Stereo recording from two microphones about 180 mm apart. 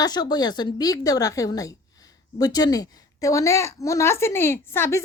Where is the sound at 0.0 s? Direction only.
20° left (ahead or behind).